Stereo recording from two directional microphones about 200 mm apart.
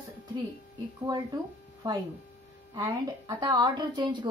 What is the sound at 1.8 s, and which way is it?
A woman's voice, 20° right (ahead or behind).